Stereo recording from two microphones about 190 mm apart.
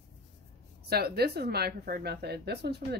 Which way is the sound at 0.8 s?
55° right (ahead or behind).